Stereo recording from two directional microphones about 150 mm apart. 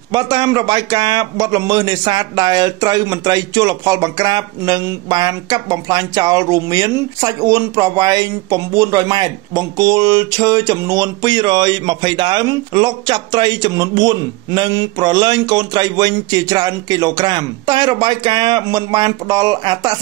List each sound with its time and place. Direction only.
0.1 s a man's voice: 30° right (ahead or behind)